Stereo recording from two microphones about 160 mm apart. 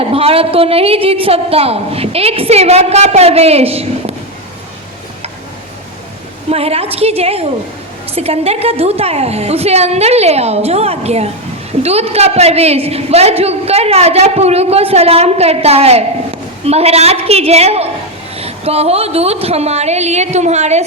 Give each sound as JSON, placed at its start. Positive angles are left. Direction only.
{"t": 0.0, "sound": "a woman's voice", "side_deg": -35}
{"t": 6.5, "sound": "a woman's voice", "side_deg": -40}